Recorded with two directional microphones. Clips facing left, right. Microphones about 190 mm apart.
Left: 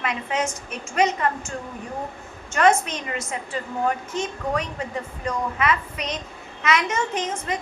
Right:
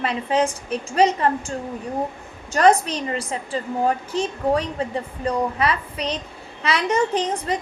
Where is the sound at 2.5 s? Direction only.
35° right (ahead or behind).